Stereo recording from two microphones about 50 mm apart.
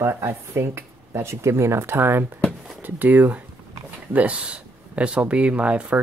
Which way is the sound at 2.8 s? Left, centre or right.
Right.